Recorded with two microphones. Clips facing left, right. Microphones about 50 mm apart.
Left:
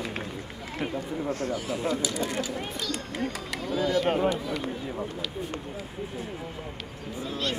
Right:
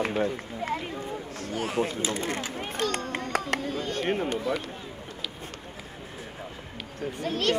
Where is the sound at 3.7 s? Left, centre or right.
Right.